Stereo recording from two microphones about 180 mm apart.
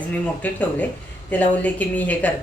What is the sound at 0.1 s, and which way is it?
Speech, 10° left (ahead or behind).